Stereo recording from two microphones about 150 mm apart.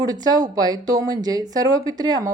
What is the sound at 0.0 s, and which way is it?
Speech, 25° right (ahead or behind).